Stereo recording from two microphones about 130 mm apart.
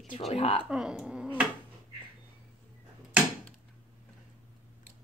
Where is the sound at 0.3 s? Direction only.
50° left (ahead or behind).